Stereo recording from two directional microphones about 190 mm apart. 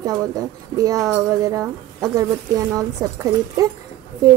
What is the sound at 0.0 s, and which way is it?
A woman's voice, 20° right (ahead or behind).